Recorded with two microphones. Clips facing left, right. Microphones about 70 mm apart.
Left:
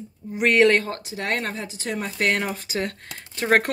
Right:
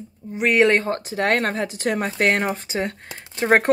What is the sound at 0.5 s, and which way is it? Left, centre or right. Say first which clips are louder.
Speech: right 1 dB; right.